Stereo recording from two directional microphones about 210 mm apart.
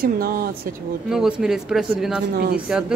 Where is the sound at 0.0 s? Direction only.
45° right (ahead or behind).